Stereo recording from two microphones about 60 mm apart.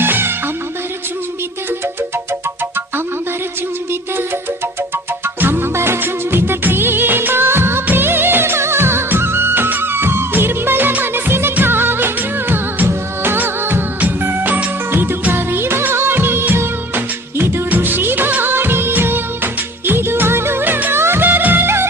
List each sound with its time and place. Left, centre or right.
0.0 s music: right
5.2 s music: right
7.9 s music of bollywood: right
11.5 s music: right
15.3 s music of bollywood: right
21.0 s music: right